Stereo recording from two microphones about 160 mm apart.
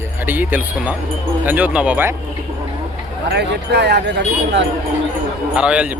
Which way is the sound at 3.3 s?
90° right.